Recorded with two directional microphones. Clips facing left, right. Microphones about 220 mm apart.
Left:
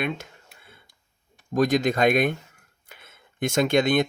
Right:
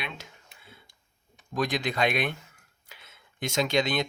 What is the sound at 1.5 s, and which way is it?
Speech, 45° left (ahead or behind).